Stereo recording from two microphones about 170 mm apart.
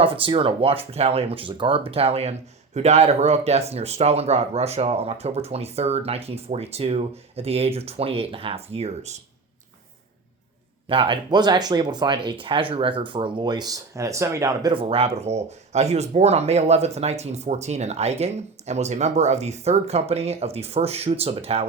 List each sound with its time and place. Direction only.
0.0 s speech: 30° right (ahead or behind)
10.8 s speech: 30° right (ahead or behind)
14.7 s speech: 35° right (ahead or behind)